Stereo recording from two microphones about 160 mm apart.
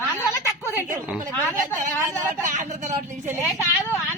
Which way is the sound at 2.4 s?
50° right (ahead or behind).